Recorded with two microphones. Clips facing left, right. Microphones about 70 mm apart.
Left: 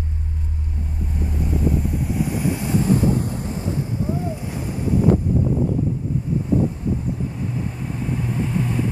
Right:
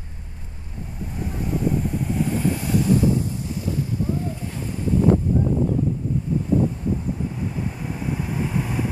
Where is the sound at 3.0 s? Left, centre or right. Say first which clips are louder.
Left 1 dB; left.